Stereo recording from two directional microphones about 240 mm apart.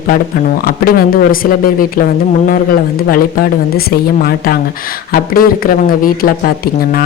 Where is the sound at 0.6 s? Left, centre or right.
Left.